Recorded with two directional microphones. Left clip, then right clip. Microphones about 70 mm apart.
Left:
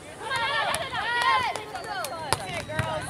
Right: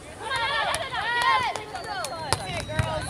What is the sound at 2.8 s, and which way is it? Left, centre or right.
Run, right.